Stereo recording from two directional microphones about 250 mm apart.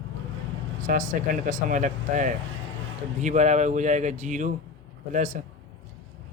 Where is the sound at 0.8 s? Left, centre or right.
Right.